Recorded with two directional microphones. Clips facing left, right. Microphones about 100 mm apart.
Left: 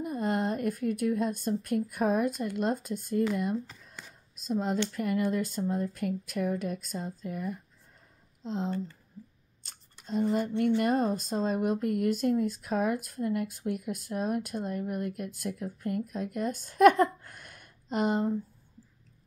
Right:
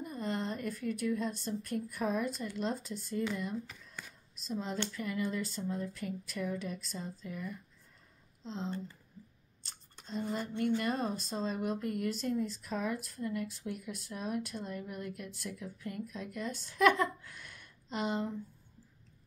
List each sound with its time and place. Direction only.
0.0 s a woman's voice: 55° left (ahead or behind)
4.4 s speech: 55° left (ahead or behind)
9.7 s a sound: 50° left (ahead or behind)
10.8 s speech: 50° left (ahead or behind)